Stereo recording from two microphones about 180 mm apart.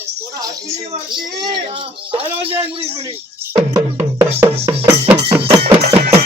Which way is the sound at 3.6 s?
15° right (ahead or behind).